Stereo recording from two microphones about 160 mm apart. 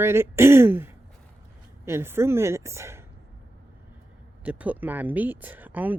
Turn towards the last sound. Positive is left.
turn(degrees=-10)  # may be behind; listen again after turning